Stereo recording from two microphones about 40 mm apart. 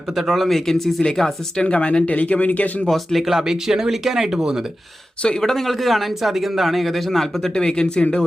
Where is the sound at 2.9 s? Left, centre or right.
Centre.